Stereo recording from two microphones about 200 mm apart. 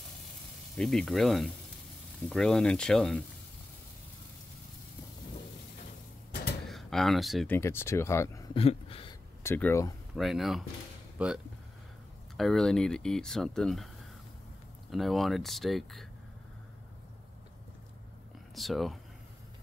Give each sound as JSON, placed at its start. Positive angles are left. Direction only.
{"t": 0.7, "sound": "speech", "side_deg": 0}
{"t": 6.7, "sound": "speech", "side_deg": 0}
{"t": 7.5, "sound": "speech", "side_deg": 10}
{"t": 8.5, "sound": "a sound", "side_deg": 30}
{"t": 9.4, "sound": "speech", "side_deg": 10}
{"t": 10.1, "sound": "speech", "side_deg": 0}
{"t": 14.9, "sound": "speech", "side_deg": 0}
{"t": 18.5, "sound": "speech", "side_deg": 0}